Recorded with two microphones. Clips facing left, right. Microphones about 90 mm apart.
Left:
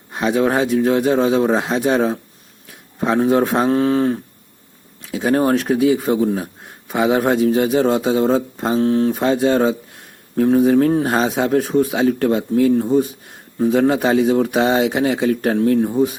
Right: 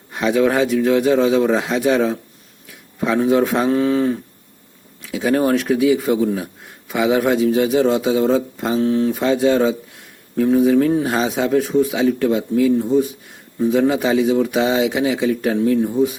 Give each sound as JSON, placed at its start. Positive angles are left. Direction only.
{"t": 0.1, "sound": "speech", "side_deg": 30}